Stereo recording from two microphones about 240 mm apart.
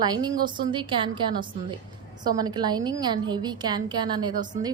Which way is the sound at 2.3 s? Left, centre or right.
Centre.